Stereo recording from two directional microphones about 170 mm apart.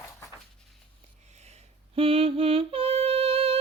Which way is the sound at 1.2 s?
40° right (ahead or behind).